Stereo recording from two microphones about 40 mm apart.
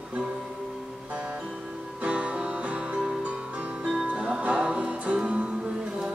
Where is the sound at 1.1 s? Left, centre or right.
Right.